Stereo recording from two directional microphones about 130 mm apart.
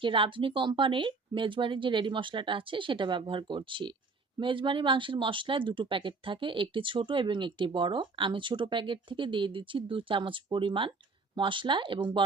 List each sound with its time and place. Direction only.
0.0 s speech: 40° right (ahead or behind)